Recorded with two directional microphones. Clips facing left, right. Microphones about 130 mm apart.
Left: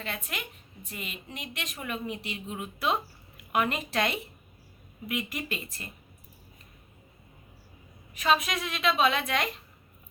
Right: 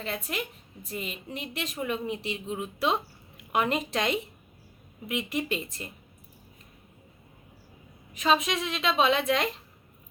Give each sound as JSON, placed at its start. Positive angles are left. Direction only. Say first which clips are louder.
{"t": 0.0, "sound": "a woman's voice", "louder": "right 4 dB", "side_deg": -35}
{"t": 8.1, "sound": "a woman's voice", "louder": "right 1 dB", "side_deg": -25}